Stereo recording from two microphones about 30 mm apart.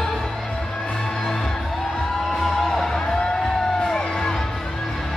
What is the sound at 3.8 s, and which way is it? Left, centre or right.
Music, left.